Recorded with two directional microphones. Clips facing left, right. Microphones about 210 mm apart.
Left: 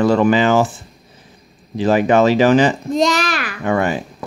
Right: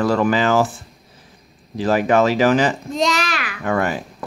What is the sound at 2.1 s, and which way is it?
A child's voice, centre (ahead or behind).